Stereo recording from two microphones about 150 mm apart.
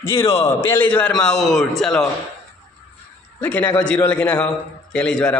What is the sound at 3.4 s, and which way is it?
A man's voice, 10° left (ahead or behind).